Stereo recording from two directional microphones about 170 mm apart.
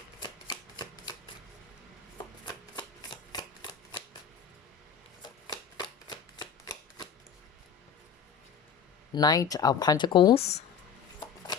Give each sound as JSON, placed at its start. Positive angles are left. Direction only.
{"t": 0.2, "sound": "shuffling cards", "side_deg": 25}
{"t": 2.7, "sound": "shuffling cards", "side_deg": 25}
{"t": 5.2, "sound": "shuffling cards", "side_deg": 25}
{"t": 9.1, "sound": "speech", "side_deg": 20}